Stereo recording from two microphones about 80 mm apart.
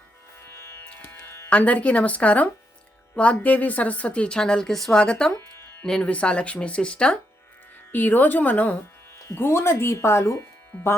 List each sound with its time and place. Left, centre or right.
0.4 s music: left
1.5 s a woman's voice: centre
5.4 s music: left
5.8 s a woman's voice: centre
7.9 s speech: left
9.1 s speech: left